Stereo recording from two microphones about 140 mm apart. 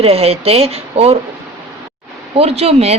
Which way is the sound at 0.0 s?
45° right (ahead or behind).